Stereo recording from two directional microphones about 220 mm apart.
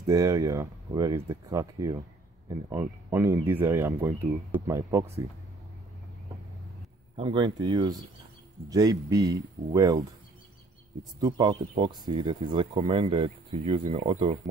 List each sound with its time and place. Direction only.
0.0 s speech: 15° right (ahead or behind)
7.2 s speech: 25° right (ahead or behind)
11.1 s speech: 20° right (ahead or behind)